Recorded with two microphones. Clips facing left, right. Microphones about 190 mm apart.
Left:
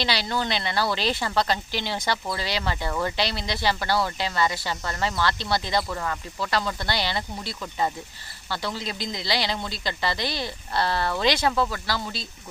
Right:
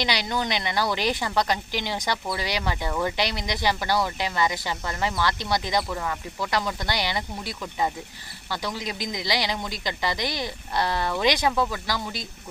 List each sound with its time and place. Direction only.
0.0 s speech: 15° right (ahead or behind)